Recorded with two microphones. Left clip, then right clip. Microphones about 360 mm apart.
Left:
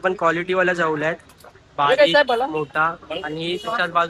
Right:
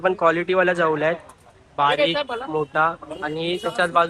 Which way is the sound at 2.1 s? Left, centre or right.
Left.